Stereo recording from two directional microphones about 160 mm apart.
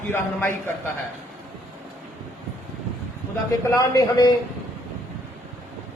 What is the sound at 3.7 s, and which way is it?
Speech, 20° left (ahead or behind).